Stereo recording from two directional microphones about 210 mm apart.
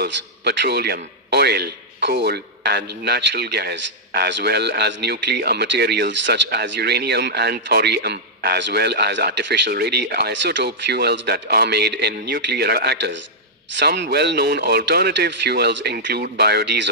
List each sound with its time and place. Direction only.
0.0 s a man's voice: 50° right (ahead or behind)